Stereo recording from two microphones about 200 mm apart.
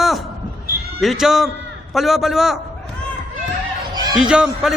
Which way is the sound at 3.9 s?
20° right (ahead or behind).